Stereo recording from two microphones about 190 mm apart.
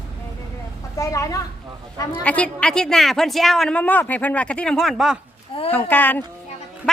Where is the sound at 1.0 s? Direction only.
15° left (ahead or behind); by 5.1 s centre (ahead or behind).